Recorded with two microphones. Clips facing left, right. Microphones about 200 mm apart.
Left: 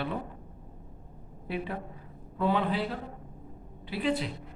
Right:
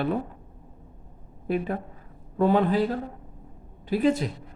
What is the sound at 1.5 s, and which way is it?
A man's voice, 45° right (ahead or behind).